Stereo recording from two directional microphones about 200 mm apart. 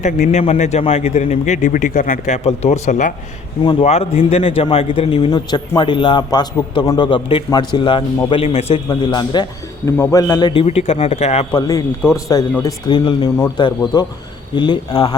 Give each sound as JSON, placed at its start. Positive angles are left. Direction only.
{"t": 0.0, "sound": "a man's voice", "side_deg": 35}
{"t": 3.6, "sound": "a man's voice", "side_deg": 25}
{"t": 11.5, "sound": "a man's voice", "side_deg": 15}